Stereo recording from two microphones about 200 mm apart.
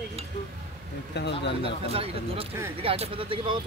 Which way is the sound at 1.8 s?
30° right (ahead or behind).